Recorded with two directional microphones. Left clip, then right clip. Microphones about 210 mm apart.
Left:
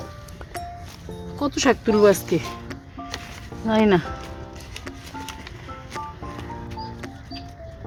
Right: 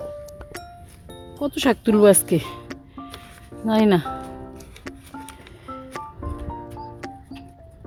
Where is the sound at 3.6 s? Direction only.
40° right (ahead or behind).